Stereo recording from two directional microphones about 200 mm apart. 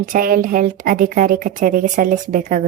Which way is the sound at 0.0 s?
45° right (ahead or behind).